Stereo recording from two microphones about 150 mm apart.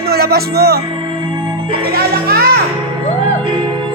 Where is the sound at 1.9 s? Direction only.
90° right.